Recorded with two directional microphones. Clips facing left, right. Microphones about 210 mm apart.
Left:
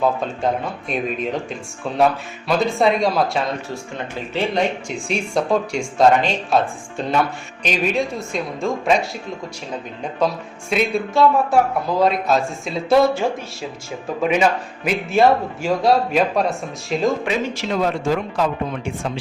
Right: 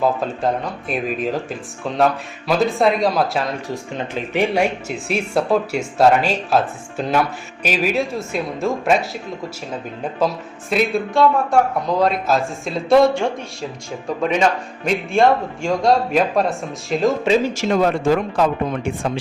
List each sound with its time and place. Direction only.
0.0 s speech: centre (ahead or behind)
3.9 s speech: 15° right (ahead or behind)
10.2 s speech: centre (ahead or behind)
17.5 s speech: 45° right (ahead or behind)